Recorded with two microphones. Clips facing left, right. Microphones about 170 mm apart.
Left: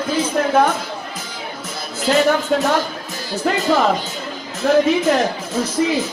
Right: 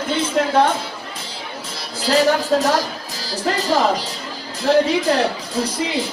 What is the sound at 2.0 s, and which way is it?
Speech, 35° right (ahead or behind).